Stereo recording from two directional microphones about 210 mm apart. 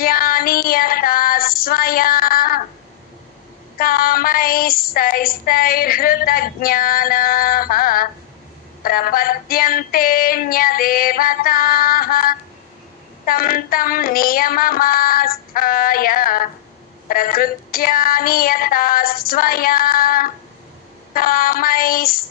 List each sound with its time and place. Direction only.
0.0 s female singing: 45° left (ahead or behind)
3.7 s child singing: 45° left (ahead or behind)